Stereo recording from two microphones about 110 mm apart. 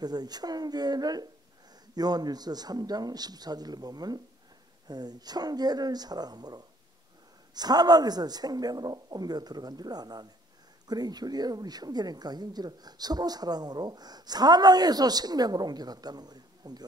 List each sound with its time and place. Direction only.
0.0 s a woman's voice: 40° right (ahead or behind)